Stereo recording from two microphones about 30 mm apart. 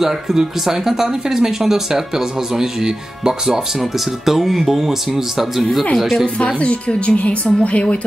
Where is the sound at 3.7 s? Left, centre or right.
Centre.